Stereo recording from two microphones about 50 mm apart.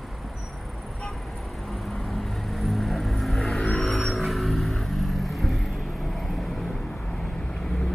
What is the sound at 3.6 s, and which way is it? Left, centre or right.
Vehicle, centre.